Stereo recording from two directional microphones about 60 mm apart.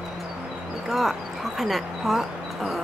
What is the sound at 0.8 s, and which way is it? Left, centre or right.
Speech, centre.